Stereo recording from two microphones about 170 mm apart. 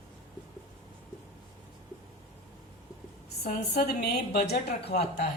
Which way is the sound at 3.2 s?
70° left (ahead or behind).